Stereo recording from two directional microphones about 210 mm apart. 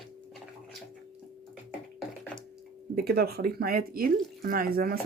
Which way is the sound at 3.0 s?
50° right (ahead or behind).